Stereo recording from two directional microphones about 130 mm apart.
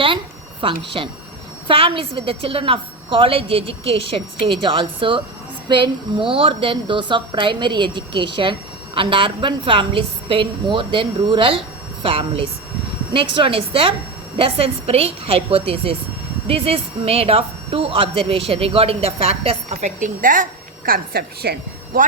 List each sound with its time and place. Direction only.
0.6 s a woman's voice: 40° right (ahead or behind); by 21.0 s 90° right